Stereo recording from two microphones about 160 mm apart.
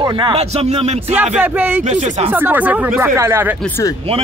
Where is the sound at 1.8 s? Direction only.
45° right (ahead or behind).